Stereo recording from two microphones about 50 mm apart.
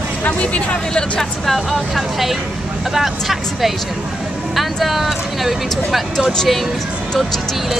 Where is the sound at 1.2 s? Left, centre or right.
Centre.